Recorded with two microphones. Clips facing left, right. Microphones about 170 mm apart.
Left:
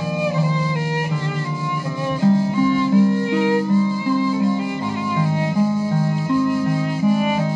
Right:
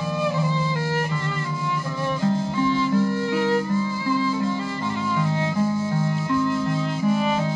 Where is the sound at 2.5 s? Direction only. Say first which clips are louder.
Left 5 dB; 15° left (ahead or behind).